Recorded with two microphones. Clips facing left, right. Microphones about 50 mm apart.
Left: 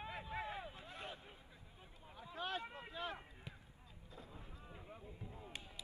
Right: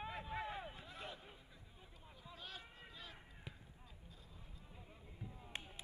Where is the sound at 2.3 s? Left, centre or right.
Left.